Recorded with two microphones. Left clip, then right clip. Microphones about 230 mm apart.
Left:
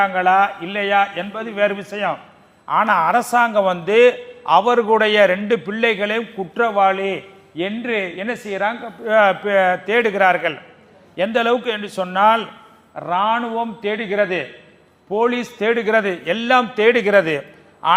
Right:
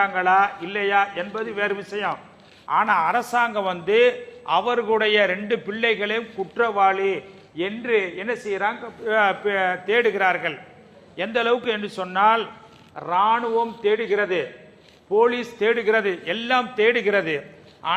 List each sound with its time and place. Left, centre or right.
0.0 s a man's voice: left